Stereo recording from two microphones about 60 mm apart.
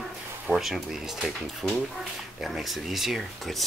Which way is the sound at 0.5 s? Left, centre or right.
Centre.